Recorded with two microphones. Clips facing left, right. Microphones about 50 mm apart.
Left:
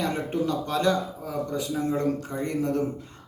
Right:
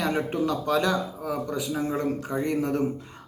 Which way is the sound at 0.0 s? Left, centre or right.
Right.